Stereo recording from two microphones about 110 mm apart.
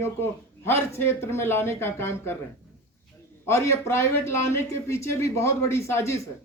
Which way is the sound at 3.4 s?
25° left (ahead or behind).